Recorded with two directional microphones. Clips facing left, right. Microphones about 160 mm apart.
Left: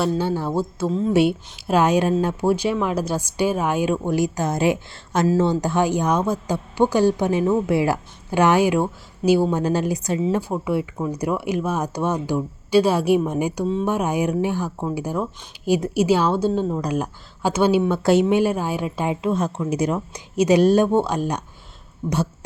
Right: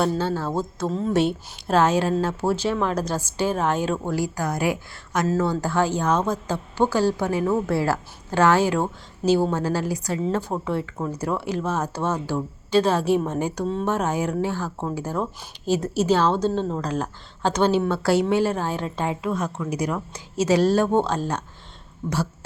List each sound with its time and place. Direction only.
0.2 s a woman's voice: 15° left (ahead or behind)
0.9 s speech: centre (ahead or behind)
1.1 s a woman's voice: 10° left (ahead or behind)